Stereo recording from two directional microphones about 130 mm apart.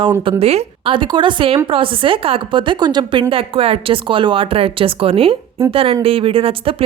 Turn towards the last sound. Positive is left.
turn(degrees=-45)  # may be behind; listen again after turning